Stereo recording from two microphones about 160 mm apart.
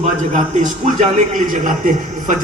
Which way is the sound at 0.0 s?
50° right (ahead or behind).